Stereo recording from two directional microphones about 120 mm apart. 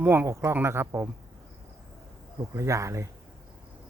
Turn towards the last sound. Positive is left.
turn(degrees=-25)  # may be behind; listen again after turning